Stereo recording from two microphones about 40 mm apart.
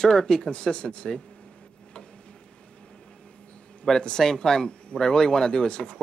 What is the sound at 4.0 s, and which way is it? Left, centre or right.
Speech, centre.